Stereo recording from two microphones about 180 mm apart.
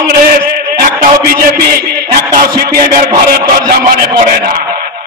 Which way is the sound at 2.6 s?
55° right (ahead or behind).